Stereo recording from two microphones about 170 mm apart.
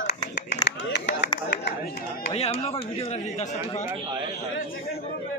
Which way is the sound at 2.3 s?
35° left (ahead or behind).